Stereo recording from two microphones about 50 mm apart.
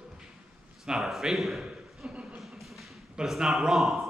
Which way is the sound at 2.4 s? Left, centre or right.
Centre.